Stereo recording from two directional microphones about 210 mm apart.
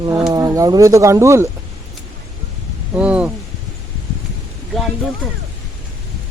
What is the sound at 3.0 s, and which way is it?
Speech, 5° right (ahead or behind).